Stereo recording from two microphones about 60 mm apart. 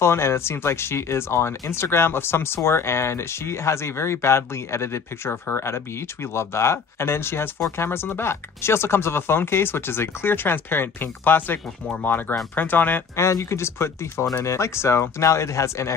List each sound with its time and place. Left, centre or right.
0.0 s speech: left
13.1 s speech: left